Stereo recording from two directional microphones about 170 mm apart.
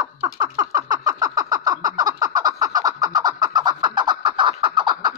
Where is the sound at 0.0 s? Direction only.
25° right (ahead or behind).